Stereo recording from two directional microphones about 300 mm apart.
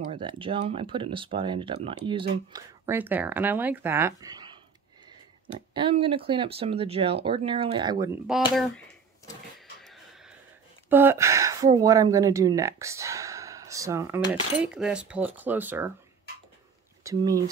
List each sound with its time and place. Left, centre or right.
0.1 s speech: centre
5.8 s speech: centre
9.8 s a sound: centre
10.9 s speech: centre
17.0 s speech: centre